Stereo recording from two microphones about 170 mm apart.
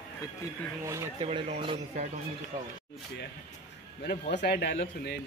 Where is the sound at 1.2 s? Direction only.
35° right (ahead or behind).